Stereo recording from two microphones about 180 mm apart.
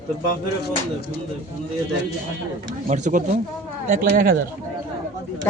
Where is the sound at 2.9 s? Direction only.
45° right (ahead or behind).